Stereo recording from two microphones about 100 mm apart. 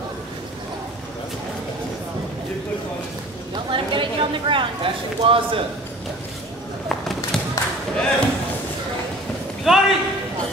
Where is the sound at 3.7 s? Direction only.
55° right (ahead or behind).